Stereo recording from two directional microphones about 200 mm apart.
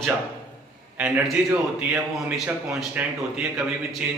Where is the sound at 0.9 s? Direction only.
5° right (ahead or behind).